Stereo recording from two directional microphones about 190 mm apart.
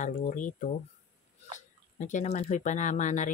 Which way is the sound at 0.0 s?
40° left (ahead or behind).